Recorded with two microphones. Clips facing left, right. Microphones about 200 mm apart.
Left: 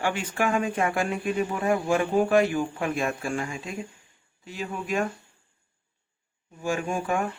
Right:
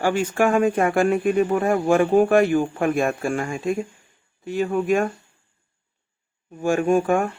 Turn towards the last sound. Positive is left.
turn(degrees=-55)  # may be behind; listen again after turning